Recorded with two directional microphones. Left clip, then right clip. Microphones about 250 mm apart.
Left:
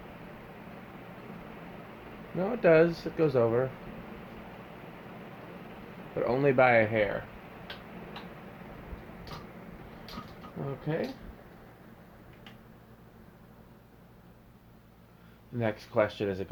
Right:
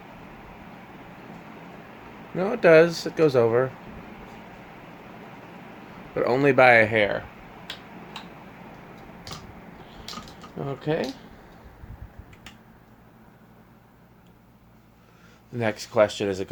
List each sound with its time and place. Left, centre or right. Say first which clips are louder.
2.4 s speech: right 7 dB; right
6.1 s speech: right 6 dB; right
10.6 s speech: right 6 dB; right
15.5 s speech: right 7 dB; right